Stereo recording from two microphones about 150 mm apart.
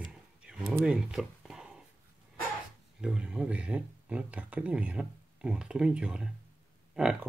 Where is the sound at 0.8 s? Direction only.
5° right (ahead or behind).